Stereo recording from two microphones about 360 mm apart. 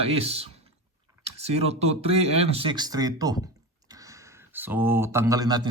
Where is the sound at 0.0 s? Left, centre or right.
Centre.